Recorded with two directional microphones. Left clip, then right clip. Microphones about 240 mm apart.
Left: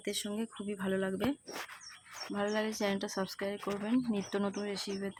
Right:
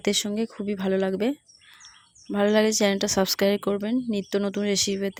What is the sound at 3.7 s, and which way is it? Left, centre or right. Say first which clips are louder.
Speech: right 7 dB; right.